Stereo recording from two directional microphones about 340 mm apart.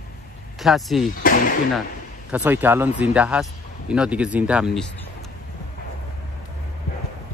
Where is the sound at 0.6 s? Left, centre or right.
Centre.